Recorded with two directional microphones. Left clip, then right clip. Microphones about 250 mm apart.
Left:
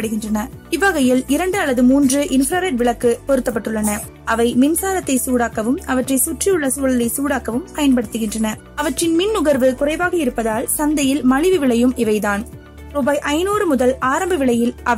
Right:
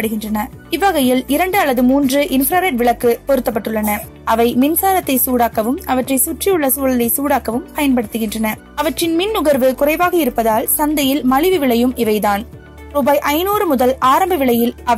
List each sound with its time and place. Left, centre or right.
0.0 s speech: centre